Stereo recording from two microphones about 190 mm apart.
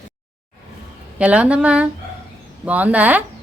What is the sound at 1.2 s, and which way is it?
A woman's voice, 5° right (ahead or behind).